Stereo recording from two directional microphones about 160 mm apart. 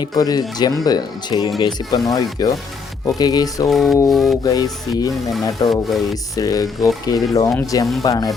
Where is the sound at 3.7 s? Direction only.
Centre (ahead or behind).